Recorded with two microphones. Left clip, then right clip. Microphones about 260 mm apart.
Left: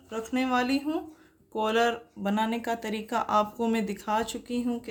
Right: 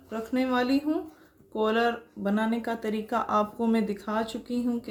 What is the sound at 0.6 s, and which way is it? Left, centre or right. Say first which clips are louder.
Speech: right 3 dB; left.